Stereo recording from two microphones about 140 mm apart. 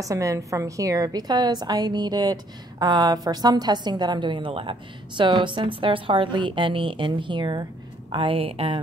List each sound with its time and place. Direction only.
0.0 s a woman's voice: 25° right (ahead or behind); by 8.7 s 40° right (ahead or behind)